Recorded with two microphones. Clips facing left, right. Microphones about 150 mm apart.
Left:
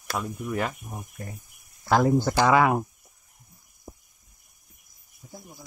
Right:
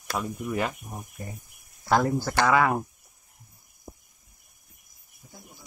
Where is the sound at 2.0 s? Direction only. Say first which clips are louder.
Left 3 dB; 20° left (ahead or behind).